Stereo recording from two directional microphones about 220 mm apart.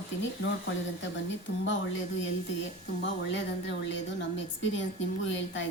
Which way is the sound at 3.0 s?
55° left (ahead or behind).